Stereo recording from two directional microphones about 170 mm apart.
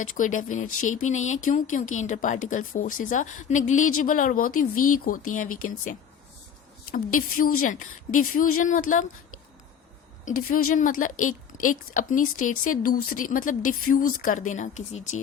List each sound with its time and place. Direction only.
0.0 s speech: 50° left (ahead or behind)
10.2 s speech: 50° left (ahead or behind)